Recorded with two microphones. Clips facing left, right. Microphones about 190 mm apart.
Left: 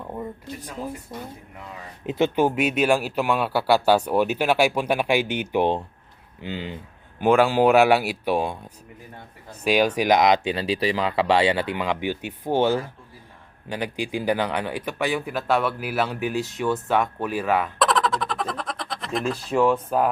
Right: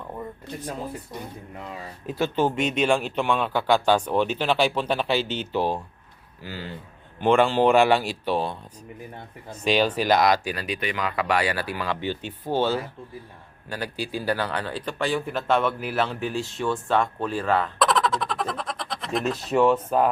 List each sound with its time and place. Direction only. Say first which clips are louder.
2.0 s speech: left 3 dB; 20° left (ahead or behind)
7.2 s speech: left 1 dB; 5° left (ahead or behind)
9.6 s speech: left 2 dB; 10° left (ahead or behind)
17.7 s speech: left 1 dB; centre (ahead or behind)